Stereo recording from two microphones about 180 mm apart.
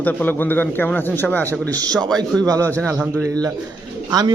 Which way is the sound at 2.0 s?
5° left (ahead or behind).